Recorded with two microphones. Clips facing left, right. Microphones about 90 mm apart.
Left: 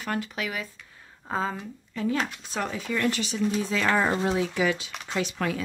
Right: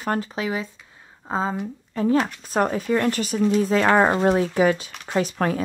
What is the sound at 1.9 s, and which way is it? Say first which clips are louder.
A woman's voice: right 7 dB; 40° right (ahead or behind).